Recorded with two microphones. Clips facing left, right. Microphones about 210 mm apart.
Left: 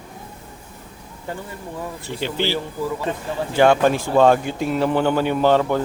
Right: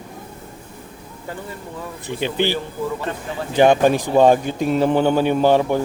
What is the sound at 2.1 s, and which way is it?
A man's voice, 15° right (ahead or behind).